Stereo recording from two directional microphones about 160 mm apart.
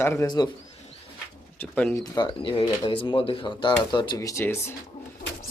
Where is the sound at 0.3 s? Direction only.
25° left (ahead or behind).